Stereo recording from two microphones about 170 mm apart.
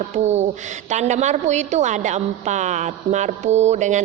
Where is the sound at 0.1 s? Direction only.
40° right (ahead or behind).